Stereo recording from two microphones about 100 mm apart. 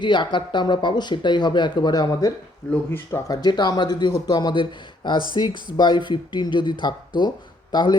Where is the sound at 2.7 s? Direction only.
20° left (ahead or behind).